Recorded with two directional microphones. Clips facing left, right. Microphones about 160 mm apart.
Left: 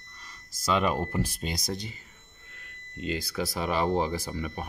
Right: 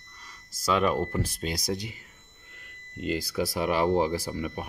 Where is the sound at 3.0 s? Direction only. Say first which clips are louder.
Right 3 dB; 10° right (ahead or behind).